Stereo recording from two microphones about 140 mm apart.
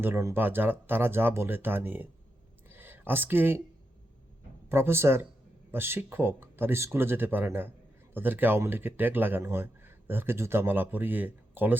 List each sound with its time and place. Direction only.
0.0 s speech: 20° right (ahead or behind)
2.6 s a sound: 15° right (ahead or behind)
4.7 s speech: 15° right (ahead or behind)